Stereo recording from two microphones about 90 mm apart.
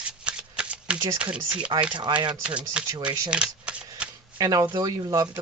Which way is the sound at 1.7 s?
55° right (ahead or behind).